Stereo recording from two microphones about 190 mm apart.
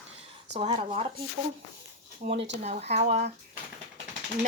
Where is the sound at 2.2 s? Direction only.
30° right (ahead or behind).